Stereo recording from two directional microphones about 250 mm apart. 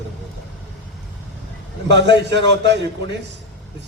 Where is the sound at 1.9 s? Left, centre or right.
Right.